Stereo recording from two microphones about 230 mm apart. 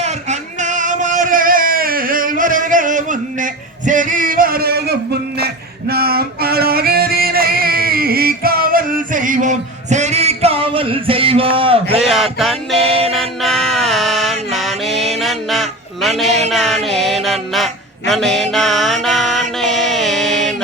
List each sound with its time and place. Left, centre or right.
0.0 s a sound: right
5.9 s music: right
12.0 s music: centre
13.1 s mantra: centre
16.5 s music: centre
18.1 s mantra: centre